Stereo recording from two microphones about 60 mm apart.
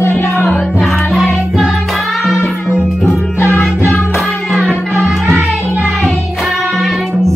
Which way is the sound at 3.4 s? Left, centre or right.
Left.